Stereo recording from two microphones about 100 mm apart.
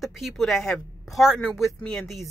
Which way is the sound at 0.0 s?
Centre (ahead or behind).